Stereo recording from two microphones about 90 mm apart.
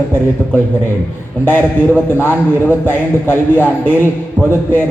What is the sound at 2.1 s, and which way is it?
A man's voice, 25° left (ahead or behind).